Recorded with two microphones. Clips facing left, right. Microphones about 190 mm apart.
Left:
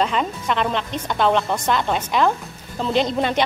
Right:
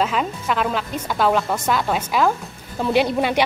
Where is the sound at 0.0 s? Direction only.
5° right (ahead or behind).